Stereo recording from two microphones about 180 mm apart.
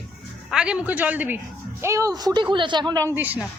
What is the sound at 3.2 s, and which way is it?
Speech, 10° right (ahead or behind).